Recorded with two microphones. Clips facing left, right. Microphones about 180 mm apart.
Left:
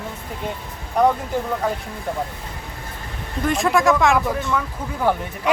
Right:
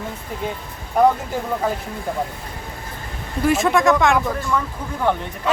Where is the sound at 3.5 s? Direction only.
Centre (ahead or behind).